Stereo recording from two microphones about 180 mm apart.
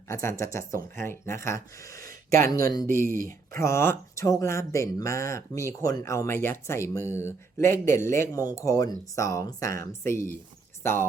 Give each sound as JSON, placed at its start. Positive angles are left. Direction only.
{"t": 0.1, "sound": "speech", "side_deg": 15}
{"t": 2.0, "sound": "a sound", "side_deg": -50}
{"t": 2.5, "sound": "speech", "side_deg": 20}
{"t": 2.8, "sound": "speech", "side_deg": -50}
{"t": 3.5, "sound": "speech", "side_deg": 15}